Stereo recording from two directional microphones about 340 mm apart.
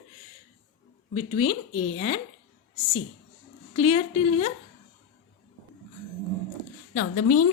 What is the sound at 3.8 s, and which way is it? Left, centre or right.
Speech, centre.